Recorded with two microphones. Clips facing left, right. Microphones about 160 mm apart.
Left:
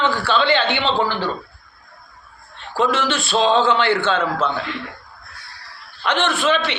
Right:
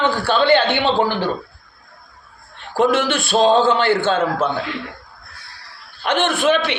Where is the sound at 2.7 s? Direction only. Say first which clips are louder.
Right 3 dB; 55° right (ahead or behind).